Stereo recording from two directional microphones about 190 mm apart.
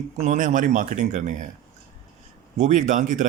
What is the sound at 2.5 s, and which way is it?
Speech, 40° right (ahead or behind).